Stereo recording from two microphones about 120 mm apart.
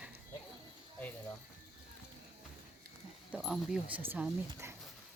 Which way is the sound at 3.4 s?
5° right (ahead or behind).